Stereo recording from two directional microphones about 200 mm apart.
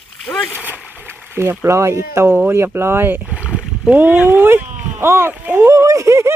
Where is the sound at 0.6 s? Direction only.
10° right (ahead or behind).